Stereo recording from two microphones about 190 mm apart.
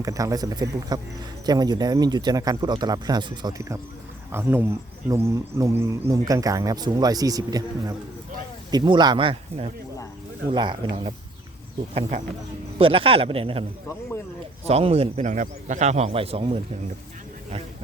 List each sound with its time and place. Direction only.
0.0 s speech: 15° right (ahead or behind)
12.8 s a man's voice: 30° right (ahead or behind)